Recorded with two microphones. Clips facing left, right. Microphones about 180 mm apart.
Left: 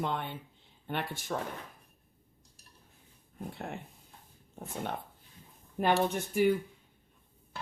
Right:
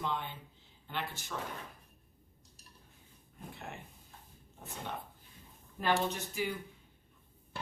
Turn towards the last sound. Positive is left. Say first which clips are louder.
# left 8 dB
turn(degrees=55)  # may be behind; listen again after turning